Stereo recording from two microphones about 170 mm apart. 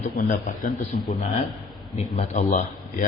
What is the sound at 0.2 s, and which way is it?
Speech, 50° left (ahead or behind).